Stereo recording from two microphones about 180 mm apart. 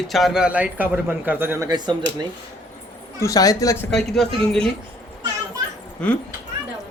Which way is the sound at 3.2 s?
20° left (ahead or behind).